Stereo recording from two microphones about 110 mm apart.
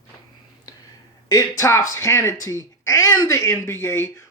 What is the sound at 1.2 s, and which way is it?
Speech, 30° left (ahead or behind).